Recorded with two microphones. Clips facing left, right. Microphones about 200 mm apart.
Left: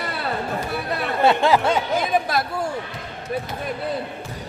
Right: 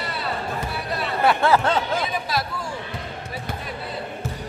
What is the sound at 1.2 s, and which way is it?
Speech, 20° left (ahead or behind).